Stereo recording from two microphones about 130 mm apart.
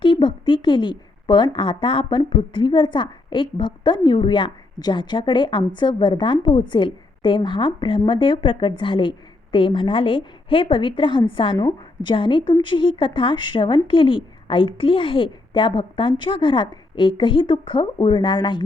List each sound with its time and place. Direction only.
0.0 s a woman's voice: 40° left (ahead or behind)